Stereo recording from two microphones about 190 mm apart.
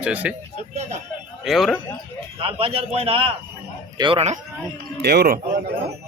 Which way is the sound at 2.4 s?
30° right (ahead or behind).